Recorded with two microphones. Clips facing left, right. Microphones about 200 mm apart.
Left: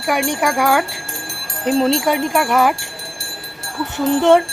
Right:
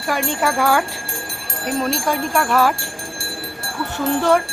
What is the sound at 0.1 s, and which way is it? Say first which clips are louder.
Speech: left 2 dB; 15° left (ahead or behind).